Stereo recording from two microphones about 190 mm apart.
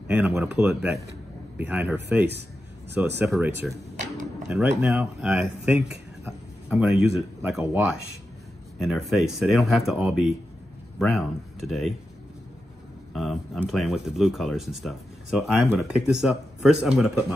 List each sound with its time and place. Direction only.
0.1 s speech: 10° right (ahead or behind)
3.0 s speech: 10° right (ahead or behind)
3.9 s a sound: 40° right (ahead or behind)
4.5 s speech: 5° right (ahead or behind)
5.9 s a sound: 5° right (ahead or behind)
7.4 s speech: 5° right (ahead or behind)
13.1 s speech: centre (ahead or behind)